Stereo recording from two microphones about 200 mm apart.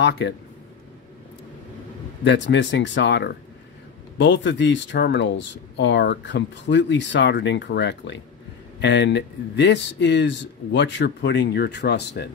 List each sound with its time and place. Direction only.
0.0 s speech: 60° left (ahead or behind)
2.2 s speech: 65° left (ahead or behind)